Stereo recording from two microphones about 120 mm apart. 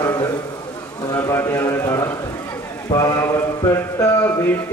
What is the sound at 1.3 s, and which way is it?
Speech, 20° left (ahead or behind).